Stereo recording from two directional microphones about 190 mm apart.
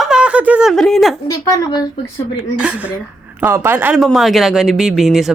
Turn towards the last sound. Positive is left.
turn(degrees=0)  # may be behind; listen again after turning